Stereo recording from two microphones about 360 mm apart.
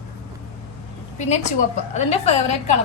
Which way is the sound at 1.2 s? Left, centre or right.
Centre.